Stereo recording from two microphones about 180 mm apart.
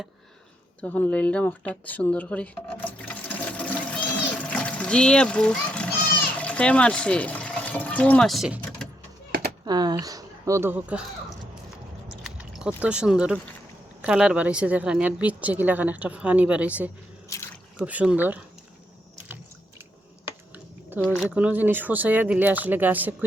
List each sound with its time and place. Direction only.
0.8 s speech: 10° left (ahead or behind)
4.4 s a sound: 5° left (ahead or behind)
9.6 s speech: 20° right (ahead or behind)
12.2 s speech: 5° right (ahead or behind)
17.2 s drip: 15° left (ahead or behind)
17.7 s speech: 5° right (ahead or behind)
20.9 s speech: 10° right (ahead or behind)